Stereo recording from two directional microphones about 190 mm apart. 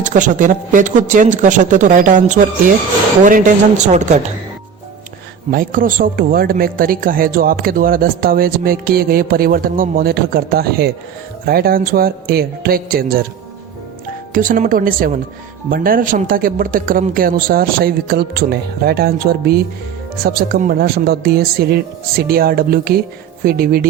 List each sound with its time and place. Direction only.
0.0 s speech: 40° right (ahead or behind)
5.5 s speech: 50° right (ahead or behind)
14.3 s speech: 45° right (ahead or behind)